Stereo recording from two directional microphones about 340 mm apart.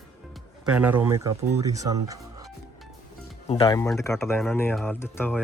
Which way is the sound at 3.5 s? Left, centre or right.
Centre.